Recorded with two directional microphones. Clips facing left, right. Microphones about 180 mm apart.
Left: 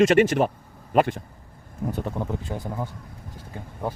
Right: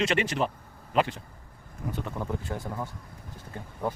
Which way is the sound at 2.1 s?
20° left (ahead or behind).